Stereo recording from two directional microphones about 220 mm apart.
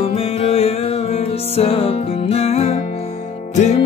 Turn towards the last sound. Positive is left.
turn(degrees=30)  # may be behind; listen again after turning